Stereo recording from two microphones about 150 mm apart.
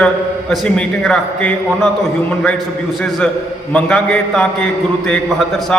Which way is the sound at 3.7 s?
5° left (ahead or behind).